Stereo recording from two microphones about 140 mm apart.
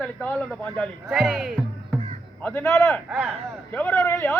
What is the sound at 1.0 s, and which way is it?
Speech, 5° right (ahead or behind).